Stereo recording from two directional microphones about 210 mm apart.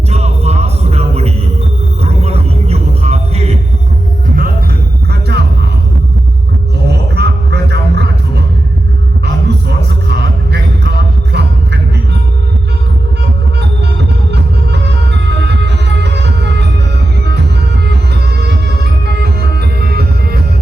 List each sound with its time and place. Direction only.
0.1 s music: 30° right (ahead or behind)
5.1 s music: 50° right (ahead or behind)
6.8 s a sound: 50° right (ahead or behind)
9.2 s music: 50° right (ahead or behind)
13.6 s music: 55° right (ahead or behind)
17.8 s music: 50° right (ahead or behind)